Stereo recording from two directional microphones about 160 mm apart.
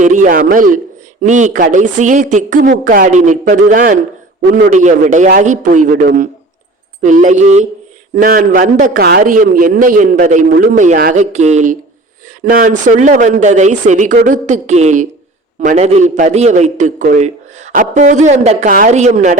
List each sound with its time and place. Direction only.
0.0 s a man's voice: 50° right (ahead or behind)
8.2 s a man's voice: 60° right (ahead or behind)
9.0 s a man's voice: 75° right (ahead or behind); by 11.2 s 60° right (ahead or behind)
11.2 s a man's voice: 45° right (ahead or behind)